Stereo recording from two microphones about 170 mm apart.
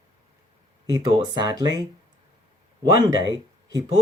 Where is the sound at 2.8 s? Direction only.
20° right (ahead or behind).